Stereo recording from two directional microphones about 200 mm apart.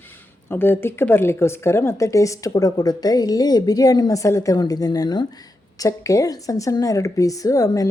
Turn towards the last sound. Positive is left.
turn(degrees=15)  # may be behind; listen again after turning